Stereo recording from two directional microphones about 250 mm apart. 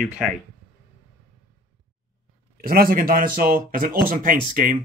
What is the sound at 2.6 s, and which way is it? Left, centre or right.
Speech, right.